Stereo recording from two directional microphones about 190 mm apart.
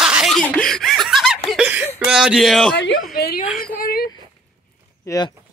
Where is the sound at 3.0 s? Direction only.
55° left (ahead or behind).